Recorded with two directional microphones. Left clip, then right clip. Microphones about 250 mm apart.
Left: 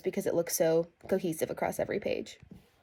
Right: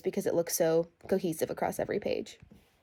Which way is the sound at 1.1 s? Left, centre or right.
Centre.